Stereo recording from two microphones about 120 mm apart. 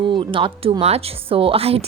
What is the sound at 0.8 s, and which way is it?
Speech, 60° right (ahead or behind).